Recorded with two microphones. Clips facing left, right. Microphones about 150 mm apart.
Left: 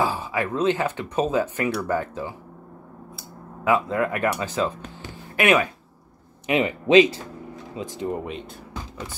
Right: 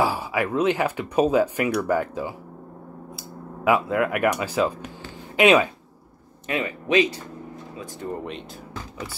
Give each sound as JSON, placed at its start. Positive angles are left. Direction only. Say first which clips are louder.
{"t": 0.0, "sound": "speech", "louder": "right 1 dB", "side_deg": -10}
{"t": 3.6, "sound": "speech", "louder": "right 1 dB", "side_deg": -10}
{"t": 6.4, "sound": "speech", "louder": "left 5 dB", "side_deg": 20}